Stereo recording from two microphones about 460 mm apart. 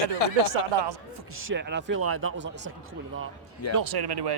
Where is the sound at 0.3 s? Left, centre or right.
Right.